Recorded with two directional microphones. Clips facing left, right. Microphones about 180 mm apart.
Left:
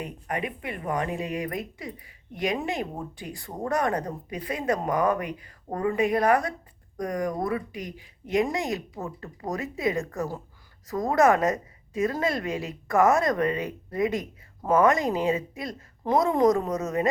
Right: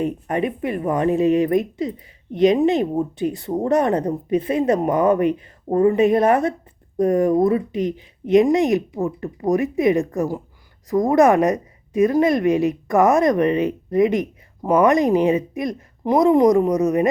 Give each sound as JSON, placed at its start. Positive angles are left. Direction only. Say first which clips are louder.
{"t": 0.0, "sound": "a woman's voice", "louder": "right 10 dB", "side_deg": -25}